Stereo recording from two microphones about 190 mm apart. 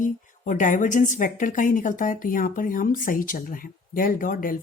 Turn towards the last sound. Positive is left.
turn(degrees=45)  # may be behind; listen again after turning